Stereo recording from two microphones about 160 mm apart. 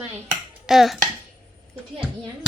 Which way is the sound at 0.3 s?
Centre (ahead or behind).